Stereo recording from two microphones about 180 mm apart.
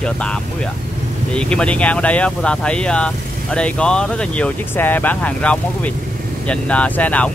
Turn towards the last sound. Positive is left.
turn(degrees=10)  # may be behind; listen again after turning